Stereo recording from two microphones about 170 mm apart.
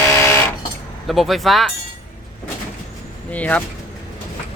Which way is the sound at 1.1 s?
Centre (ahead or behind).